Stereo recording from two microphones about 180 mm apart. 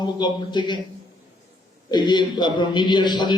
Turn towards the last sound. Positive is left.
turn(degrees=25)  # may be behind; listen again after turning